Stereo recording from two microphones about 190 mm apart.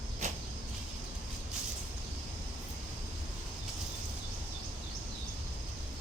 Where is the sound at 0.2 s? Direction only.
35° right (ahead or behind).